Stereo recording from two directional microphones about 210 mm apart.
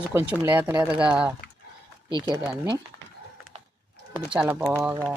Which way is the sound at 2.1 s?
20° right (ahead or behind).